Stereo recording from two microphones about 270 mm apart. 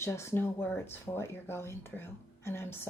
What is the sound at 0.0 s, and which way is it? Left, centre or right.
A woman's voice, centre.